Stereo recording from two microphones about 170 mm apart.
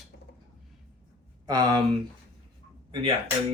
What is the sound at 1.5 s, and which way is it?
Speech, 25° right (ahead or behind).